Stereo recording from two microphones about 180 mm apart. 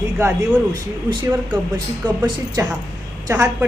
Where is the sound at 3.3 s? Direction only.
10° right (ahead or behind).